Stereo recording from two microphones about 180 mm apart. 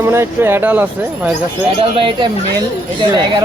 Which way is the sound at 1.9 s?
25° right (ahead or behind).